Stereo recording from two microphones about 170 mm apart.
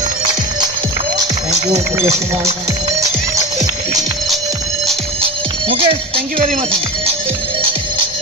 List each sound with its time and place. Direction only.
5.2 s music: 30° right (ahead or behind)